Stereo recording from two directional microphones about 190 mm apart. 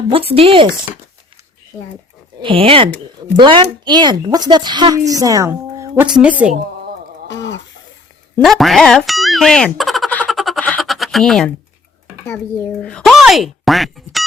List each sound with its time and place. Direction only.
0.1 s a woman's voice: 30° right (ahead or behind)
2.4 s a woman's voice: 30° right (ahead or behind)
5.9 s speech: 5° right (ahead or behind)
8.4 s a sound: centre (ahead or behind)
12.8 s speech: 5° left (ahead or behind)